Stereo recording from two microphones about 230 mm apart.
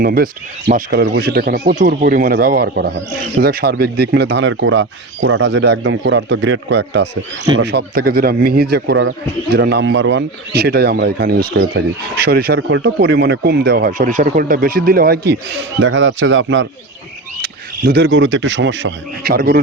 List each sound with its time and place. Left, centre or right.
0.0 s speech: right
15.8 s speech: right
17.4 s speech: right